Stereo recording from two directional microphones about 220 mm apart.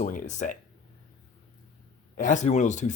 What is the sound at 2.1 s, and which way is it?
Speech, 35° left (ahead or behind).